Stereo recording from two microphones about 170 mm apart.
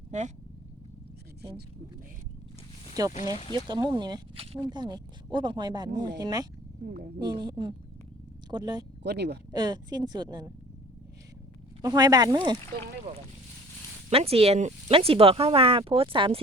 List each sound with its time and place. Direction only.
0.1 s speech: 45° right (ahead or behind)
3.0 s speech: 20° right (ahead or behind)
9.0 s speech: 75° right (ahead or behind)
9.5 s speech: 25° right (ahead or behind)
11.8 s speech: 25° right (ahead or behind)
14.1 s speech: 35° right (ahead or behind)